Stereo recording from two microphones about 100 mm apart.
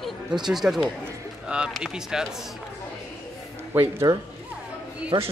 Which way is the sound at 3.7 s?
25° right (ahead or behind).